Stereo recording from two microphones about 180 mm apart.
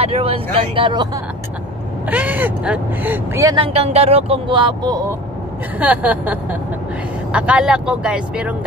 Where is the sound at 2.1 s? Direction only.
10° right (ahead or behind).